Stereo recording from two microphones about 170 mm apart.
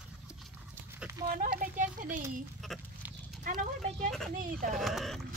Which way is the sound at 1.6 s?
50° right (ahead or behind).